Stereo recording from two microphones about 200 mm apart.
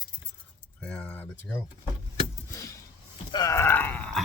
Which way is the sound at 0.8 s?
5° left (ahead or behind).